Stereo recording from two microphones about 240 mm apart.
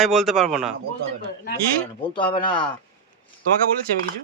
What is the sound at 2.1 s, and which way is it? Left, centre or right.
Speech, centre.